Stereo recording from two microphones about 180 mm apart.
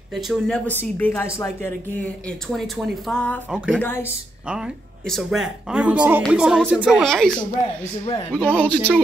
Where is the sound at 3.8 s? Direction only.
10° left (ahead or behind).